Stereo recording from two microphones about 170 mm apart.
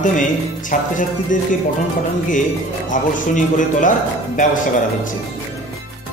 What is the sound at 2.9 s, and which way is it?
Speech, 50° left (ahead or behind).